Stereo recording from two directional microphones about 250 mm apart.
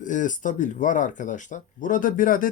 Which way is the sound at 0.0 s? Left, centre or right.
Left.